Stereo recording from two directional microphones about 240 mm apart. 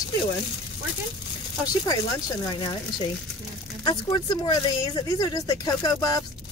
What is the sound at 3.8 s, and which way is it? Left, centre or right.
Speech, centre.